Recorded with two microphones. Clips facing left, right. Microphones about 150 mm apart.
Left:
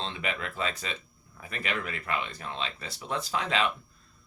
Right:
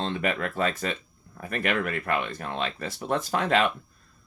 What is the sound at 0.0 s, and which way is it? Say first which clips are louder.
Speech: right 6 dB; 50° right (ahead or behind).